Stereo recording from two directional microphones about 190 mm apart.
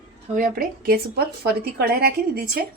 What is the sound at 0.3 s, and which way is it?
Speech, 45° right (ahead or behind).